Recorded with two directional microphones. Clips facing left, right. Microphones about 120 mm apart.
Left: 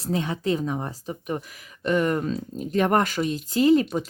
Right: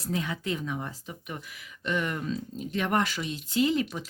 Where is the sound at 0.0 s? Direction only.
35° left (ahead or behind).